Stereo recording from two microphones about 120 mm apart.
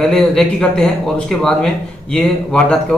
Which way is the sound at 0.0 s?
5° left (ahead or behind).